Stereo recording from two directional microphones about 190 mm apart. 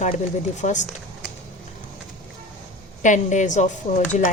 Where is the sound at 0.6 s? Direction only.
40° left (ahead or behind).